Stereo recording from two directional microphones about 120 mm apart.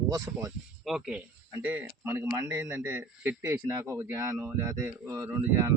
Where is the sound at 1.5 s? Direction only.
15° right (ahead or behind).